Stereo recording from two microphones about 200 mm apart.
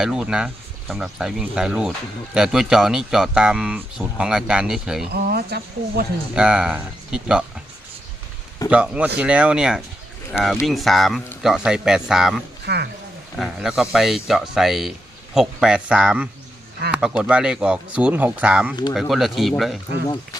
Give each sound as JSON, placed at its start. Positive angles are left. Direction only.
{"t": 0.0, "sound": "speech", "side_deg": -5}
{"t": 5.1, "sound": "speech", "side_deg": -50}
{"t": 6.3, "sound": "speech", "side_deg": -5}
{"t": 8.7, "sound": "speech", "side_deg": -5}
{"t": 12.6, "sound": "speech", "side_deg": -55}
{"t": 13.3, "sound": "speech", "side_deg": 0}